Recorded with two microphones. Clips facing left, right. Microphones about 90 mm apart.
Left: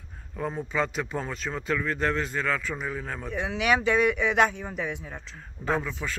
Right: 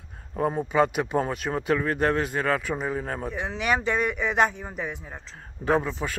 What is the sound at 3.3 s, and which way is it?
Speech, centre (ahead or behind).